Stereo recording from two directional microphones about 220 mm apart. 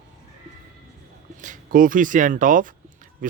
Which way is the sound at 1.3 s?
35° right (ahead or behind).